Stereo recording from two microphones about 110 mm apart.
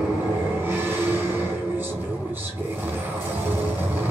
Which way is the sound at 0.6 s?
20° right (ahead or behind).